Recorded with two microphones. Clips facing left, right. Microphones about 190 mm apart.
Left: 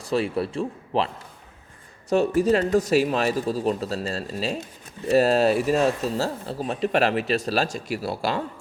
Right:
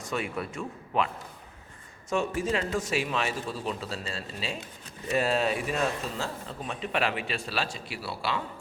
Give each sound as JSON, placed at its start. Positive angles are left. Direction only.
{"t": 0.0, "sound": "speech", "side_deg": 35}